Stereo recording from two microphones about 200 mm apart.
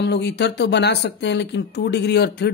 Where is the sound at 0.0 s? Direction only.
60° left (ahead or behind).